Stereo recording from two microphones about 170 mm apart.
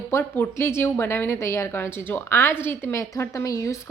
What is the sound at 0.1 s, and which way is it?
Speech, 15° left (ahead or behind).